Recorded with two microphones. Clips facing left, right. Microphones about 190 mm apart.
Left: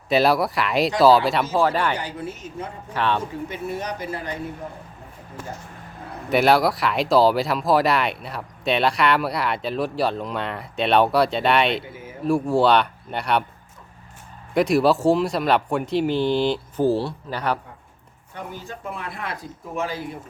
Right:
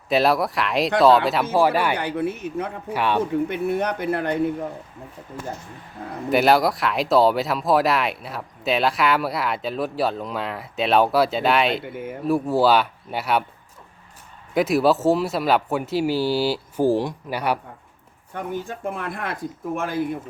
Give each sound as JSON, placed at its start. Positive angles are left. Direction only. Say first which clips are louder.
{"t": 0.1, "sound": "speech", "louder": "left 1 dB", "side_deg": 0}
{"t": 1.5, "sound": "speech", "louder": "right 3 dB", "side_deg": -10}
{"t": 2.0, "sound": "speech", "louder": "right 6 dB", "side_deg": -60}
{"t": 2.9, "sound": "speech", "louder": "even", "side_deg": -10}
{"t": 3.5, "sound": "speech", "louder": "right 6 dB", "side_deg": -60}
{"t": 6.3, "sound": "speech", "louder": "even", "side_deg": 0}
{"t": 11.9, "sound": "speech", "louder": "right 7 dB", "side_deg": -60}
{"t": 12.2, "sound": "speech", "louder": "even", "side_deg": 0}
{"t": 14.5, "sound": "speech", "louder": "even", "side_deg": 0}
{"t": 18.3, "sound": "speech", "louder": "right 6 dB", "side_deg": -50}